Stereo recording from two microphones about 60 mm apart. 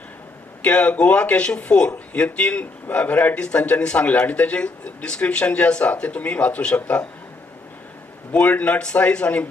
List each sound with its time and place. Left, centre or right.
0.6 s a man's voice: centre
8.3 s a man's voice: left